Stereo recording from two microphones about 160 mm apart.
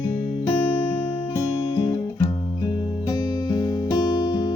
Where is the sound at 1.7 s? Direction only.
25° left (ahead or behind).